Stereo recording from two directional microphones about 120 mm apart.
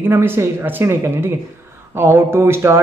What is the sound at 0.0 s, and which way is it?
Speech, 20° right (ahead or behind).